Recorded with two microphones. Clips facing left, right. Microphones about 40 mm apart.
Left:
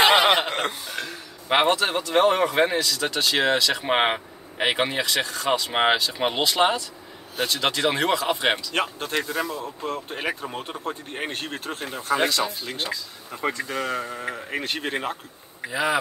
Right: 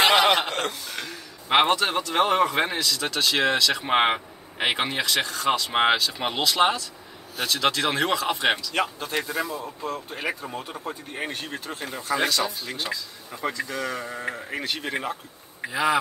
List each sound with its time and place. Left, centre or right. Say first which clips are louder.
0.0 s a sound: left 1 dB; centre
0.9 s speech: left 2 dB; centre
8.7 s speech: left 1 dB; left
11.8 s speech: left 2 dB; left
12.8 s speech: left 1 dB; left
13.5 s speech: left 2 dB; left
15.7 s speech: right 1 dB; centre